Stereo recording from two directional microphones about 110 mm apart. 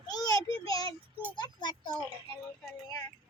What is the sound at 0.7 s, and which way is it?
Child singing, 35° left (ahead or behind).